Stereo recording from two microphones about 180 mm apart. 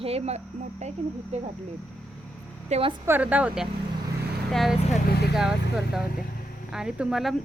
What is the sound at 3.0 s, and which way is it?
A woman's voice, 10° right (ahead or behind).